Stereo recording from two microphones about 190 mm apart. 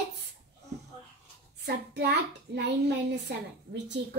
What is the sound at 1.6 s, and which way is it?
A woman's voice, 55° right (ahead or behind).